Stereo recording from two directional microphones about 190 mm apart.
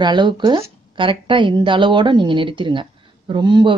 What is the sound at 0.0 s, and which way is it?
Speech, 25° right (ahead or behind).